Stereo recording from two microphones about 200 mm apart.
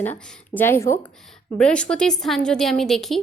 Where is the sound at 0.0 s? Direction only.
10° left (ahead or behind).